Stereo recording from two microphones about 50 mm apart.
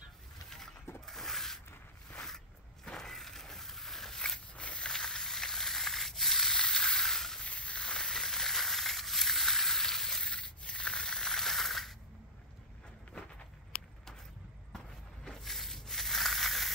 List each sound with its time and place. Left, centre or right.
1.0 s a sound: centre
4.6 s a sound: left; by 6.5 s centre
6.5 s crushing: centre
7.4 s crushing: left; by 10.2 s centre
10.2 s sanding: left; by 11.9 s centre
15.2 s crushing: centre